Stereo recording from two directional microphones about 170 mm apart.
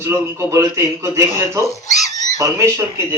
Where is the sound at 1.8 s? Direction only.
45° left (ahead or behind).